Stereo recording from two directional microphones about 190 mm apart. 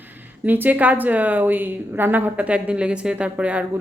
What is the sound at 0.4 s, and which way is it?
A woman's voice, 10° right (ahead or behind).